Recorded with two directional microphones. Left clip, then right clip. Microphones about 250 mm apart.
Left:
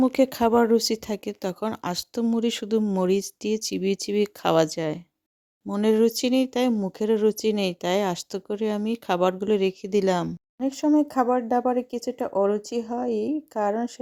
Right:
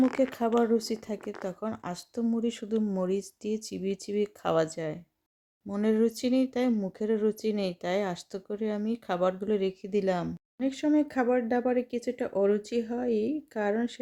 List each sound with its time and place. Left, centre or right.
0.0 s speech: left
10.6 s speech: centre